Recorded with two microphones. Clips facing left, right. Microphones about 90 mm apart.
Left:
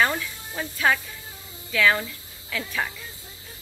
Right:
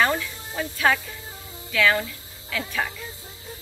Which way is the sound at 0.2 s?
Centre (ahead or behind).